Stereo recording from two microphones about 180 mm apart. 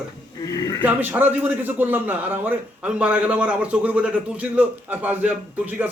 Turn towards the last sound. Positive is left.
turn(degrees=-10)  # may be behind; listen again after turning